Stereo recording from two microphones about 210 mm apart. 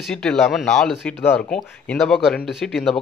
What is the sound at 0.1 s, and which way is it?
Speech, centre (ahead or behind).